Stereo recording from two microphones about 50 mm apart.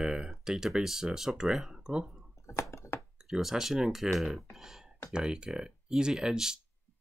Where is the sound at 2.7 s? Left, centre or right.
Left.